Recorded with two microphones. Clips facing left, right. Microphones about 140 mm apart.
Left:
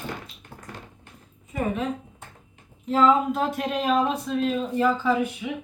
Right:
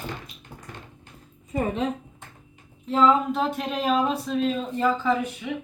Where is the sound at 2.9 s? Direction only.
5° left (ahead or behind).